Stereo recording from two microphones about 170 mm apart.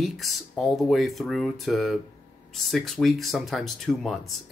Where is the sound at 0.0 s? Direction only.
Centre (ahead or behind).